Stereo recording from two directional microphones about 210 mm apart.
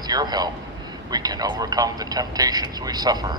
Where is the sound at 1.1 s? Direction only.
20° right (ahead or behind).